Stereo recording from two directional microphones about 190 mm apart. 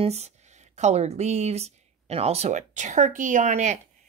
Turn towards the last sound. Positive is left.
turn(degrees=-40)  # may be behind; listen again after turning